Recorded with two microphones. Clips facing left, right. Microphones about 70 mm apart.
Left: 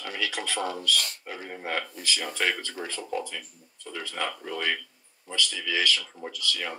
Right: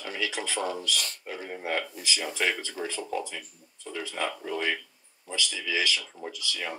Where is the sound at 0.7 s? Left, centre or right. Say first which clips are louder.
Left 3 dB; centre.